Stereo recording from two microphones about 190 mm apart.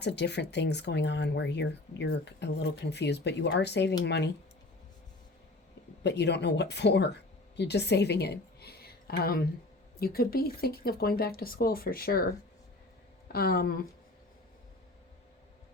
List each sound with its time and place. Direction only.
0.0 s speech: 65° left (ahead or behind)
6.0 s speech: 65° left (ahead or behind)